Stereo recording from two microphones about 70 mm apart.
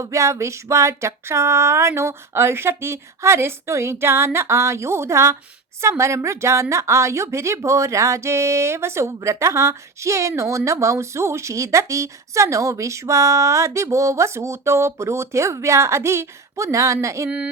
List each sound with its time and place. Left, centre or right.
0.0 s a sound: right
5.8 s a woman's voice: right
17.2 s speech: centre